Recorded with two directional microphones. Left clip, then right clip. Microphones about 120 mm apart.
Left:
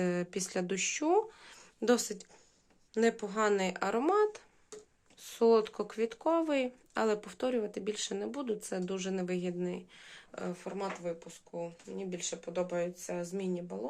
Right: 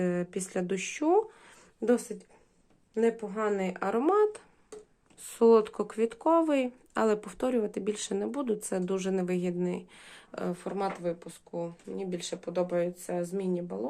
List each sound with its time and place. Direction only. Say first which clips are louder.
0.0 s speech: right 2 dB; 15° left (ahead or behind)
0.6 s speech: right 3 dB; centre (ahead or behind)
1.8 s speech: right 2 dB; 30° left (ahead or behind)
3.6 s speech: right 2 dB; 15° left (ahead or behind)
4.0 s speech: right 4 dB; centre (ahead or behind); by 13.7 s 30° right (ahead or behind)